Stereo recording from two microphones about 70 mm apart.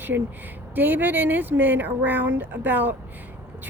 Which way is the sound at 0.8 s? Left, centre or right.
Right.